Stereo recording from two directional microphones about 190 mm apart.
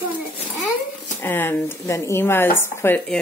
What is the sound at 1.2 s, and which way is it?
Speech, 10° left (ahead or behind).